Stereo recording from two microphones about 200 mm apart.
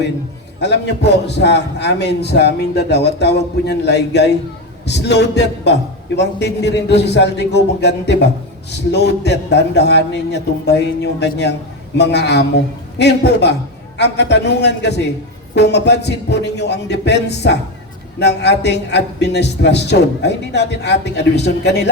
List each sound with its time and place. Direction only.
0.6 s a man's voice: 55° left (ahead or behind)